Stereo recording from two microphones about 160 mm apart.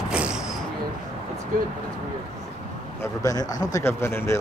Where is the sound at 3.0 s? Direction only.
20° left (ahead or behind).